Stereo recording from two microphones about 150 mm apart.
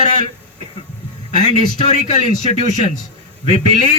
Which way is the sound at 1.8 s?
50° left (ahead or behind).